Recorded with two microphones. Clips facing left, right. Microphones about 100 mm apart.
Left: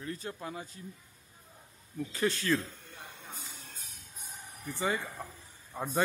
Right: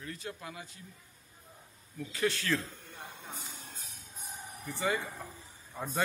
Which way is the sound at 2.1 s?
35° left (ahead or behind).